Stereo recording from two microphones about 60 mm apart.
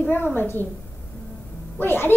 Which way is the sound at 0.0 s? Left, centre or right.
Left.